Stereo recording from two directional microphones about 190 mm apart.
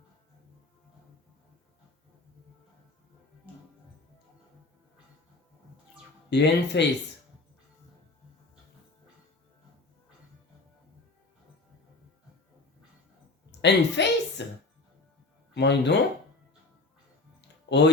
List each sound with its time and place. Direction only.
6.3 s speech: 65° left (ahead or behind)
13.6 s a sound: 65° left (ahead or behind)
15.5 s speech: 65° left (ahead or behind)
17.7 s speech: 65° left (ahead or behind)